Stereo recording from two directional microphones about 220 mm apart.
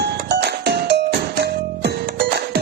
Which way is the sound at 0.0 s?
50° right (ahead or behind).